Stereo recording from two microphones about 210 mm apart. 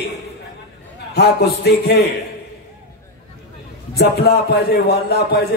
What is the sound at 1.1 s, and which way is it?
Speech, 50° left (ahead or behind).